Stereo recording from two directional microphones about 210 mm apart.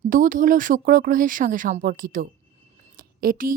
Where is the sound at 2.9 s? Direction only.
45° right (ahead or behind).